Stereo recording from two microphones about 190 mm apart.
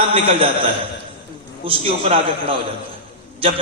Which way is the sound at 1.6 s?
30° right (ahead or behind).